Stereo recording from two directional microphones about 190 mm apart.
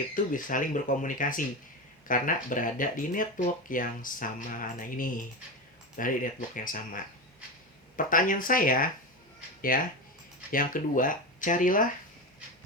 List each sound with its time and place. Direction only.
0.1 s speech: 45° left (ahead or behind)